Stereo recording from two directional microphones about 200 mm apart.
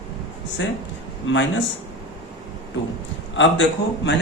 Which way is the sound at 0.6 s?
70° left (ahead or behind).